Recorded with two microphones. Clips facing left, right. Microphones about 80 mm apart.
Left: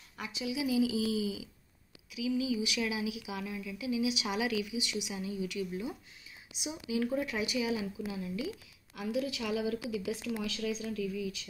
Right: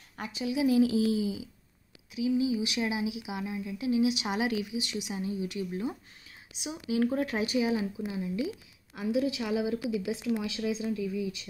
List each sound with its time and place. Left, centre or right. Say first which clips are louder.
0.2 s speech: right 6 dB; right
8.9 s a woman's voice: right 5 dB; right